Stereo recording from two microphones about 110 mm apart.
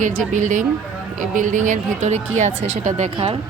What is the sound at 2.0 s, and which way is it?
Speech, 90° right.